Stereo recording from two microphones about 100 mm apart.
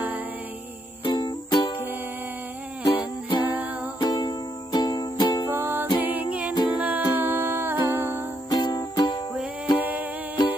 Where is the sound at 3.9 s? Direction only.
45° left (ahead or behind).